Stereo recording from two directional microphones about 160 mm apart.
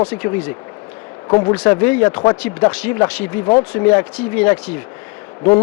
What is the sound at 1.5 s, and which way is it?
A man's voice, 10° left (ahead or behind).